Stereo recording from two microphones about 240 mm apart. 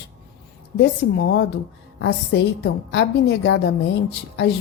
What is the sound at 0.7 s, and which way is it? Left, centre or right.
A woman's voice, left.